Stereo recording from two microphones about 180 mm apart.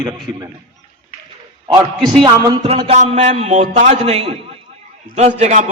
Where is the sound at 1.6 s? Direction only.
25° right (ahead or behind).